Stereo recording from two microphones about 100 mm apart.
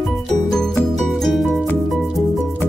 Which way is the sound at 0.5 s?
5° left (ahead or behind).